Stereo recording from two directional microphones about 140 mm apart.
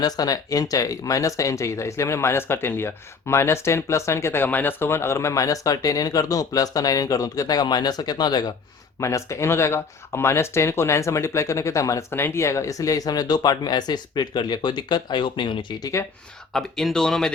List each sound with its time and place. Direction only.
0.0 s speech: 25° left (ahead or behind)
16.5 s speech: 5° left (ahead or behind)